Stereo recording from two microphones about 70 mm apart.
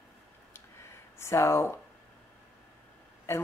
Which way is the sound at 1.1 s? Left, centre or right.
Left.